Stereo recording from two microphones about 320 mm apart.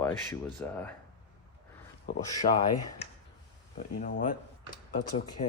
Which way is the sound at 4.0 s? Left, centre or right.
Left.